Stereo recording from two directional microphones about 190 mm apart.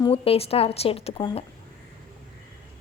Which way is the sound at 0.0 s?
30° left (ahead or behind).